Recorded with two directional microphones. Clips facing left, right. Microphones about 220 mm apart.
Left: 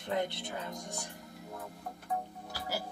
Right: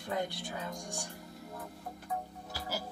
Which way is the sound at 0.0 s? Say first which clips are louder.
Left 2 dB; 20° left (ahead or behind).